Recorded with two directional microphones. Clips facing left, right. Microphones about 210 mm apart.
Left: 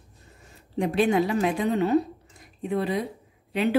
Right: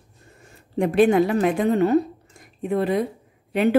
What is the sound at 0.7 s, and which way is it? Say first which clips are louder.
A woman's voice: right 5 dB; 55° right (ahead or behind).